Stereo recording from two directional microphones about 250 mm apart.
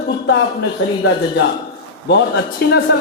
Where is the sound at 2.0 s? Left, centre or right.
Left.